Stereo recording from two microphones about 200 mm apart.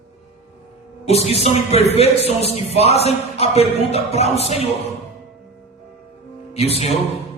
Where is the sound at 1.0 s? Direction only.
30° left (ahead or behind).